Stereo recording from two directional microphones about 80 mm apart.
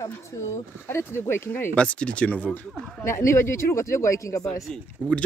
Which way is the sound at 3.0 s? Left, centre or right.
Left.